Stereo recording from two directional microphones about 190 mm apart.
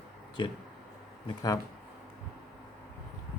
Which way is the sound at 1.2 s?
20° left (ahead or behind).